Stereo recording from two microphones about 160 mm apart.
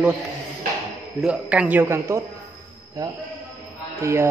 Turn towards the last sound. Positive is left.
turn(degrees=-15)  # may be behind; listen again after turning